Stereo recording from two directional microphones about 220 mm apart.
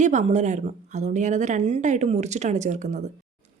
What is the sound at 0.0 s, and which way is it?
A woman's voice, 35° right (ahead or behind).